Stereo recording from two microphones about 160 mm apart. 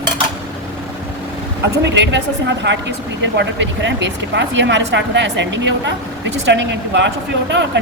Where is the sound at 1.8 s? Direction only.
90° right.